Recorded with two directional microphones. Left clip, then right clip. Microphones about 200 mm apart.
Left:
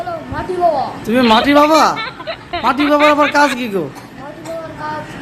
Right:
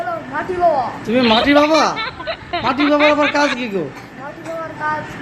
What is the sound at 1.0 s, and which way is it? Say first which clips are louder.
Speech: left 3 dB; 5° left (ahead or behind).